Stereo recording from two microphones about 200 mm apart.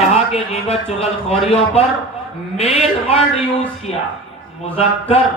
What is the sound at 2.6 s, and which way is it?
Speech, 30° left (ahead or behind).